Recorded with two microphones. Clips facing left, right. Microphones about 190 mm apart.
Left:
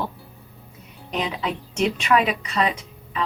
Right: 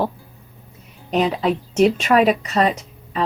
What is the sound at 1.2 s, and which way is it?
A woman's voice, 40° right (ahead or behind).